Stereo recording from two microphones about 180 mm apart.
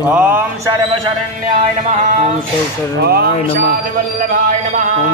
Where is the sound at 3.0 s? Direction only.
60° right (ahead or behind).